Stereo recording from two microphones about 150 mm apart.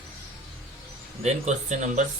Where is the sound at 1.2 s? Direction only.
50° right (ahead or behind).